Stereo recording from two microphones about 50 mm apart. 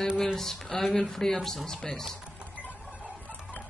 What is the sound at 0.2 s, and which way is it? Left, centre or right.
Speech, centre.